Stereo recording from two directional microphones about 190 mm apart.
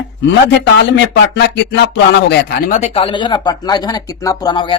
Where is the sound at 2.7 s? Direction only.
40° left (ahead or behind).